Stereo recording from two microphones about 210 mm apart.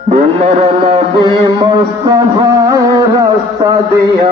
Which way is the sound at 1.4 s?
20° right (ahead or behind).